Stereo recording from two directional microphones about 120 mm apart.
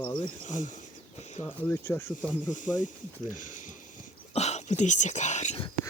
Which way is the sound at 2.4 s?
90° left.